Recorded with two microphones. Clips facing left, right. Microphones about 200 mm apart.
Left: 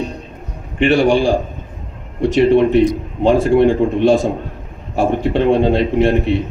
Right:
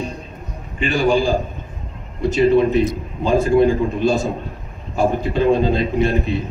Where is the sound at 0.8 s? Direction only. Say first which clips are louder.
Left 5 dB; 75° left (ahead or behind).